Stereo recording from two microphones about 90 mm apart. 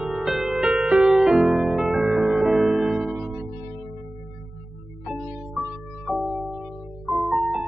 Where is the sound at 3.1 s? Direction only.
35° right (ahead or behind).